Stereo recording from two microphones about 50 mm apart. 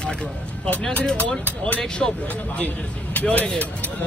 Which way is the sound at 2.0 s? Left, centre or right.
Centre.